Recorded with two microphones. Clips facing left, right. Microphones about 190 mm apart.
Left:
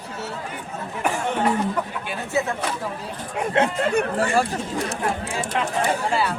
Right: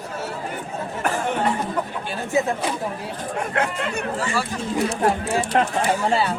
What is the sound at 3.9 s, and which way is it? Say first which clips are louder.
Speech: left 5 dB; 60° left (ahead or behind).